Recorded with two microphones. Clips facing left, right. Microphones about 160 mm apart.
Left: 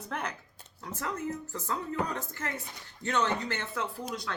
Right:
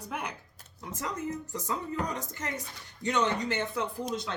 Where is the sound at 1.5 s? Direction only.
15° right (ahead or behind).